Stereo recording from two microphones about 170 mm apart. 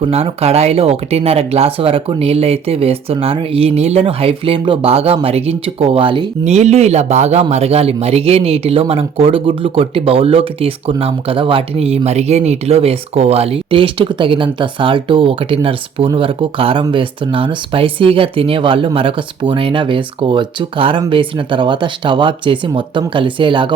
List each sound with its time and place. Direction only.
0.0 s speech: 35° right (ahead or behind)